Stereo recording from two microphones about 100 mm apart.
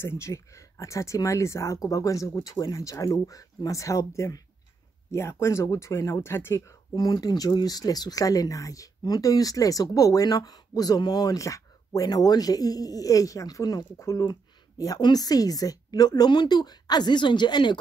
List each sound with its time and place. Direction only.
0.0 s a woman's voice: 25° left (ahead or behind); by 17.7 s 50° left (ahead or behind)